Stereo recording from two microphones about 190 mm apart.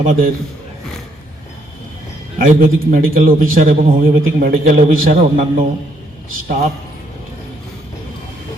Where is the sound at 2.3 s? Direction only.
45° right (ahead or behind).